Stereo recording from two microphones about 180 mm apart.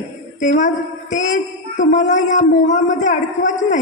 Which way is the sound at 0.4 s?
45° left (ahead or behind).